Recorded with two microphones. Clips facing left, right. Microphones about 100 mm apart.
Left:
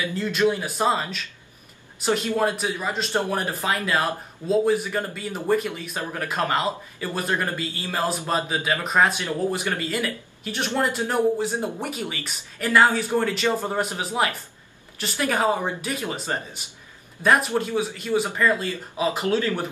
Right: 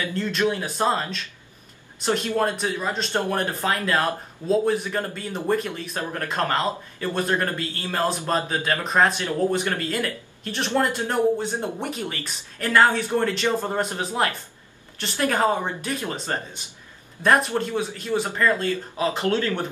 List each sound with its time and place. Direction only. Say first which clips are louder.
0.0 s speech: left 2 dB; 5° left (ahead or behind)